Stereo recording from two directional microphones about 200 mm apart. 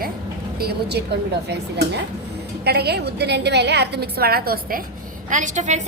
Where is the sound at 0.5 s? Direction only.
50° right (ahead or behind).